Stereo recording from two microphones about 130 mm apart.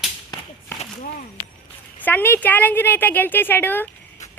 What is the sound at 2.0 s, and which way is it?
A woman's voice, 15° left (ahead or behind).